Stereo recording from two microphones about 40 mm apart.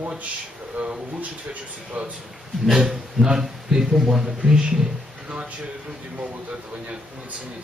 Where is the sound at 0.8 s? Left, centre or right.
Right.